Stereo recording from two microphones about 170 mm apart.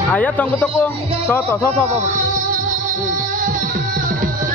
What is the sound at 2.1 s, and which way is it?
Music, 50° right (ahead or behind).